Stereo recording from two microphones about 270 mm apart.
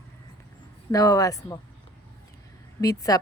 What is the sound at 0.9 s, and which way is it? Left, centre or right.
Speech, centre.